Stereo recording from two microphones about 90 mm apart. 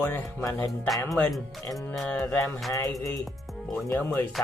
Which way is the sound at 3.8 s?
25° left (ahead or behind).